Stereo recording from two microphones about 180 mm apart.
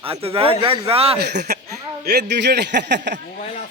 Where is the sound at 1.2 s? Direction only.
65° right (ahead or behind).